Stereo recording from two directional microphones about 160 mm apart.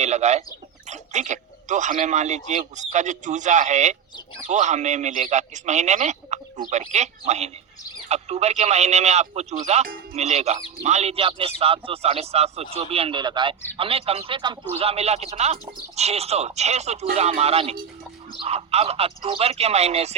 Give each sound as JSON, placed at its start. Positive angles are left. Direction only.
{"t": 0.0, "sound": "a man's voice", "side_deg": -45}